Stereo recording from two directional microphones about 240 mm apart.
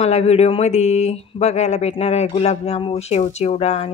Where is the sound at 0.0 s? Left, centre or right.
Left.